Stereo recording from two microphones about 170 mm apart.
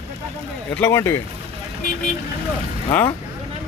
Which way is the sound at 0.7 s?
15° left (ahead or behind).